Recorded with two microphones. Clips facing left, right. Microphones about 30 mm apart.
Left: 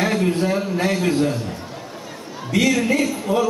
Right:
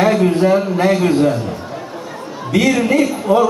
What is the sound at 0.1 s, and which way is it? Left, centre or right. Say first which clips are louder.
A man's voice: right 7 dB; centre.